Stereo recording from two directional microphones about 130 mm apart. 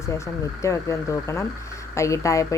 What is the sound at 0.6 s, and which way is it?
Speech, 25° left (ahead or behind).